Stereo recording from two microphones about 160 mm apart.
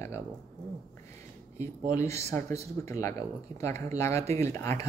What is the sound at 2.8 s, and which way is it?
Speech, 20° left (ahead or behind).